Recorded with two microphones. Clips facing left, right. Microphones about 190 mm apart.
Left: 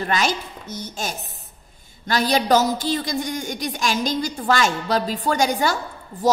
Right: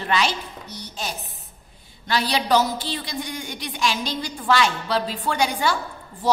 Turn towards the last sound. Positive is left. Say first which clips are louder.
# left 2 dB
turn(degrees=40)  # may be behind; listen again after turning